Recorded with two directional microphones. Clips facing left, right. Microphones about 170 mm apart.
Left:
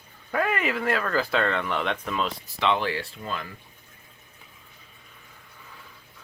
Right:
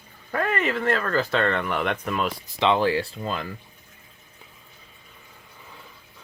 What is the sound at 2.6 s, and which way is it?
Speech, 35° right (ahead or behind).